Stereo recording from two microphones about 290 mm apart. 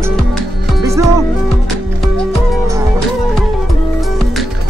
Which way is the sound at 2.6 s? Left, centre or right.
Centre.